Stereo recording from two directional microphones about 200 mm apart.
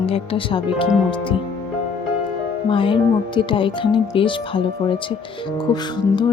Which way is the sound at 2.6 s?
25° left (ahead or behind).